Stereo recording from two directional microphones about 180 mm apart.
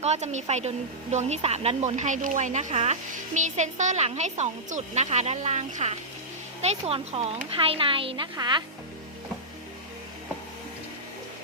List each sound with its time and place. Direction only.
0.0 s speech: 40° right (ahead or behind)